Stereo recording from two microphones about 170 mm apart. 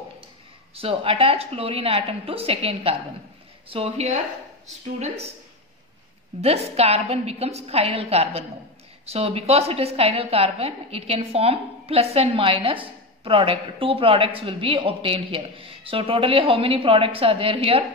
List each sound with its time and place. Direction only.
0.7 s a woman's voice: 35° right (ahead or behind)
6.4 s a woman's voice: 35° right (ahead or behind)